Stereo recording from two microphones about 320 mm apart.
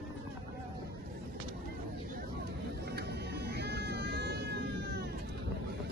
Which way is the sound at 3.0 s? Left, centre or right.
Right.